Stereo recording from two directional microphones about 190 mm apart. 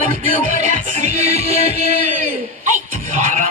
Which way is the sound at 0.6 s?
35° right (ahead or behind).